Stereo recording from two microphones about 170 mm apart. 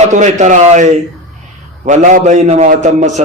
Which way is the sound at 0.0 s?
45° right (ahead or behind).